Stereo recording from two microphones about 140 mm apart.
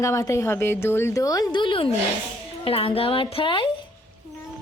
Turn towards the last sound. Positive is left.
turn(degrees=35)  # may be behind; listen again after turning